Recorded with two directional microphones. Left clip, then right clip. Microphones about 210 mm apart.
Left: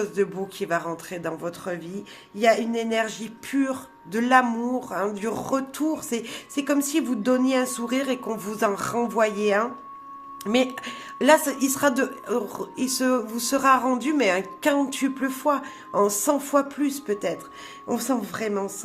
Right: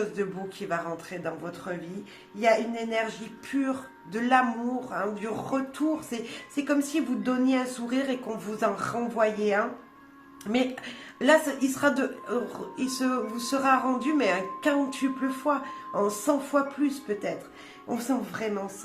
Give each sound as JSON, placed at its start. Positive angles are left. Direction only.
{"t": 0.0, "sound": "speech", "side_deg": 45}